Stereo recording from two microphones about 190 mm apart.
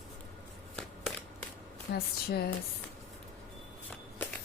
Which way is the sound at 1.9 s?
55° left (ahead or behind).